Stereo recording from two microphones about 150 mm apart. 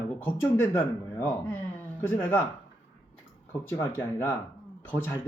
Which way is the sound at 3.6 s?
15° left (ahead or behind).